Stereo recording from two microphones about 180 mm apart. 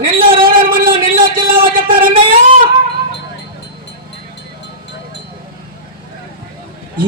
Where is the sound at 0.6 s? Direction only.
55° right (ahead or behind).